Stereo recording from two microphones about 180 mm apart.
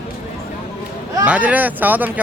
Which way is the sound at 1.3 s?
10° right (ahead or behind).